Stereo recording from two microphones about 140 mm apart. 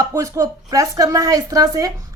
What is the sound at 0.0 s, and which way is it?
A woman's voice, 25° right (ahead or behind).